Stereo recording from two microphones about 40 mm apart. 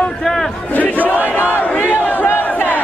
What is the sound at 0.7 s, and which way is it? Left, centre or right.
Battle cry, left.